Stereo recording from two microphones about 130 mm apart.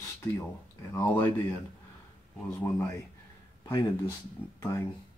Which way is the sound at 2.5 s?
20° left (ahead or behind).